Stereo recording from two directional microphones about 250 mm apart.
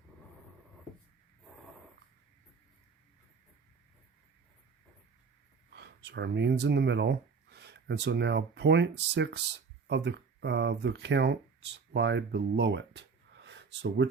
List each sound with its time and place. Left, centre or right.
5.7 s speech: right